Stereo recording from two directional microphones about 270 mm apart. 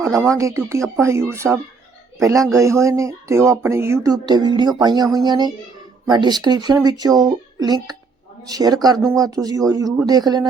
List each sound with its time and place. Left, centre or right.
0.1 s speech: centre